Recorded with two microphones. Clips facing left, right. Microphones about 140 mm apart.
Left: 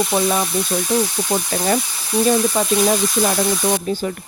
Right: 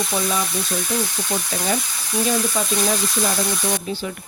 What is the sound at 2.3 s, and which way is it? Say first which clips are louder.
Speech: left 6 dB; 40° left (ahead or behind).